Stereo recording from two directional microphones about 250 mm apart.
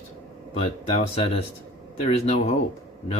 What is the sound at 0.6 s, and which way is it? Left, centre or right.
Speech, left.